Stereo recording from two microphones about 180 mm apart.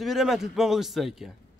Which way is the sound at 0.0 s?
Centre (ahead or behind).